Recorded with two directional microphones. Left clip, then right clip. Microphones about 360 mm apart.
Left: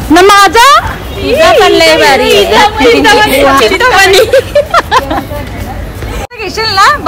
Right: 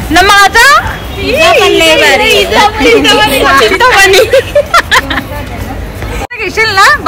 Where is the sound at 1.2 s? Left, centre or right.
Left.